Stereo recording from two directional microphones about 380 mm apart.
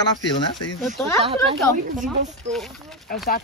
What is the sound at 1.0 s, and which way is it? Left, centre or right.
Speech, centre.